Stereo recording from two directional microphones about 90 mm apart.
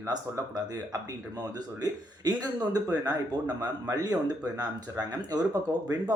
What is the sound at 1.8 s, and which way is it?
Speech, 45° right (ahead or behind).